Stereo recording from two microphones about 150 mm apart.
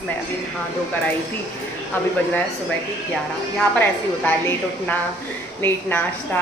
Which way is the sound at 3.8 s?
10° left (ahead or behind).